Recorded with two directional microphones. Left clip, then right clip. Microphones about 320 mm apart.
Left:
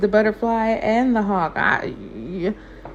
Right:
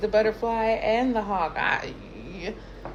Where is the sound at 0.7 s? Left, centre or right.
Left.